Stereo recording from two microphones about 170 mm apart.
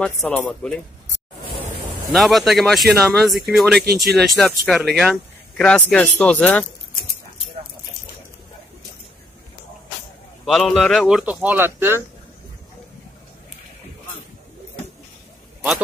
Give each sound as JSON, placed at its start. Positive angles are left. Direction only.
{"t": 0.0, "sound": "speech", "side_deg": 5}
{"t": 1.5, "sound": "a sound", "side_deg": -30}
{"t": 2.1, "sound": "speech", "side_deg": 0}
{"t": 10.4, "sound": "speech", "side_deg": 0}